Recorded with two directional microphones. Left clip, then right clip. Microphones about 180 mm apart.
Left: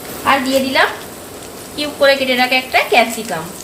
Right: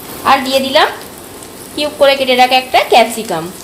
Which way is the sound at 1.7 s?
25° right (ahead or behind).